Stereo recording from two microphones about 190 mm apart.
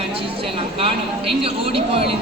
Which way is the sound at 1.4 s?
30° right (ahead or behind).